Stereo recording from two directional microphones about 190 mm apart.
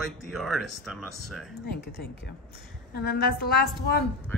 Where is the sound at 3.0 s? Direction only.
55° left (ahead or behind).